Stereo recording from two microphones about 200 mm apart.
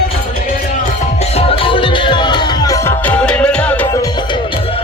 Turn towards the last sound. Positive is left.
turn(degrees=5)  # may be behind; listen again after turning